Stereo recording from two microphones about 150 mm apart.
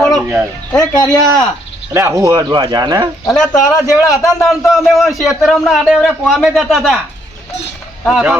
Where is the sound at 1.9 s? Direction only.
20° right (ahead or behind).